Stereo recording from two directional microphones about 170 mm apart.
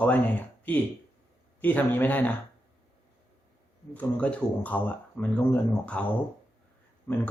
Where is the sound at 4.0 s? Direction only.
10° left (ahead or behind).